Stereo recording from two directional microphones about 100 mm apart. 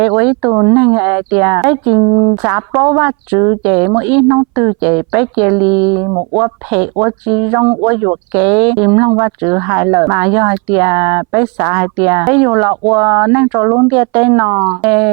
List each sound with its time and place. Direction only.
0.0 s a woman's voice: 15° right (ahead or behind)
2.0 s speech: 30° right (ahead or behind)
7.9 s speech: 15° right (ahead or behind)
14.8 s a woman's voice: 15° right (ahead or behind)